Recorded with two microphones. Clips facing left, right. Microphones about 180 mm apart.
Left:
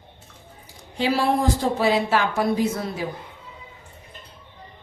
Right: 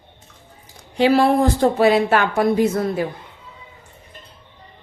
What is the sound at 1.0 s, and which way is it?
Speech, 65° right (ahead or behind).